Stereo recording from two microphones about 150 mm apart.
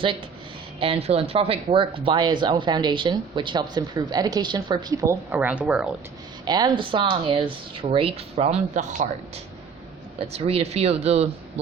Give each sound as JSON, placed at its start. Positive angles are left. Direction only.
{"t": 0.8, "sound": "speech", "side_deg": -40}
{"t": 5.3, "sound": "speech", "side_deg": -10}
{"t": 6.4, "sound": "speech", "side_deg": -25}
{"t": 10.2, "sound": "speech", "side_deg": -40}